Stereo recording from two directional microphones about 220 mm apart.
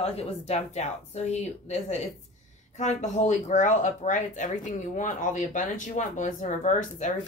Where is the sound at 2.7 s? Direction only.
30° left (ahead or behind).